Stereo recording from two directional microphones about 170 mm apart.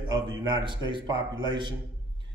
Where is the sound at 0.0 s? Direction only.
25° right (ahead or behind).